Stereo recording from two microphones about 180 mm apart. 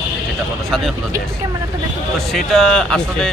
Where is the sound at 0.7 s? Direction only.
Centre (ahead or behind).